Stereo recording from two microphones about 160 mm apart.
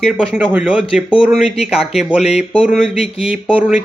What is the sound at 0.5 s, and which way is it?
Speech, 5° right (ahead or behind).